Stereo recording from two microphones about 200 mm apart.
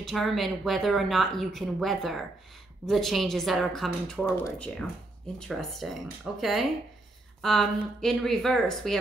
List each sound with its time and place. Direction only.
0.0 s speech: centre (ahead or behind)